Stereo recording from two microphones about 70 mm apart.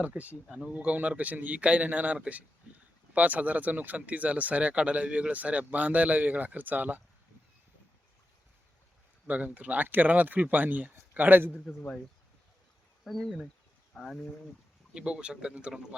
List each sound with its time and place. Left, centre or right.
0.0 s a man's voice: right
9.2 s a man's voice: right
13.1 s speech: centre
14.9 s speech: centre